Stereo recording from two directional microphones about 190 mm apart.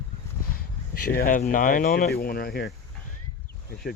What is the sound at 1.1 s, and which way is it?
Speech, 50° left (ahead or behind).